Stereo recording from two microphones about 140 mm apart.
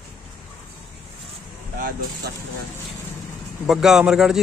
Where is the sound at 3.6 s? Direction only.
5° right (ahead or behind).